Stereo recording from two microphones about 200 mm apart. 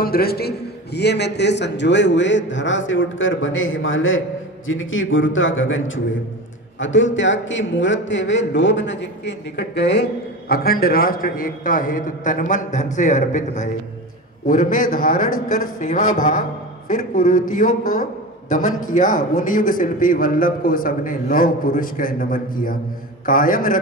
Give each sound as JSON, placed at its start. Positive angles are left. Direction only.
{"t": 0.0, "sound": "a man's voice", "side_deg": 50}
{"t": 18.7, "sound": "a man's voice", "side_deg": 90}
{"t": 18.9, "sound": "a man's voice", "side_deg": 40}